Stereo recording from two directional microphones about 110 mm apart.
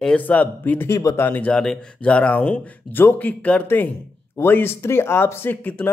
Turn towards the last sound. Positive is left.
turn(degrees=15)  # may be behind; listen again after turning